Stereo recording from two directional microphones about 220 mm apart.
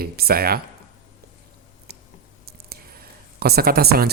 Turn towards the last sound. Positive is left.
turn(degrees=-45)  # may be behind; listen again after turning